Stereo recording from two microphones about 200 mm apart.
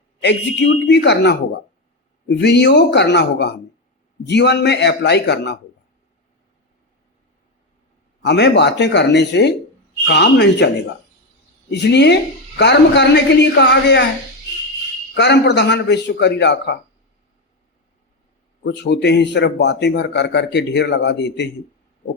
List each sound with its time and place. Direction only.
0.9 s a man's voice: 60° left (ahead or behind)
2.4 s a man's voice: 60° left (ahead or behind)
8.2 s a man's voice: 60° left (ahead or behind)
11.7 s a man's voice: 60° left (ahead or behind)
15.1 s a man's voice: 60° left (ahead or behind)
18.6 s a man's voice: 55° left (ahead or behind)